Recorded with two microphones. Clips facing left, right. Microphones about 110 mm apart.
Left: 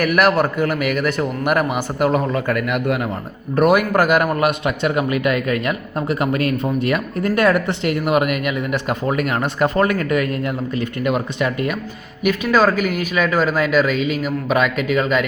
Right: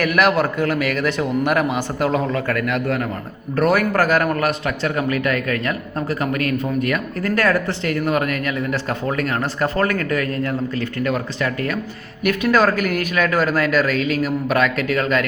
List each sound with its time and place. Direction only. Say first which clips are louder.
0.0 s speech: left 1 dB; 5° left (ahead or behind)